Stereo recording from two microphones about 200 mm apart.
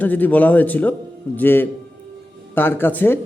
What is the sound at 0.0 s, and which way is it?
A man's voice, 10° left (ahead or behind).